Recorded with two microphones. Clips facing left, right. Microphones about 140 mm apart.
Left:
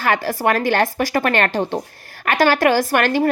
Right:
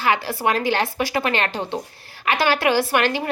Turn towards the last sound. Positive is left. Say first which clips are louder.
# left 3 dB
turn(degrees=45)  # may be behind; listen again after turning